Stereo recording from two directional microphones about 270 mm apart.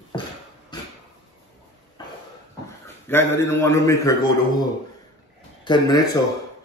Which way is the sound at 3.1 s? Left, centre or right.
Centre.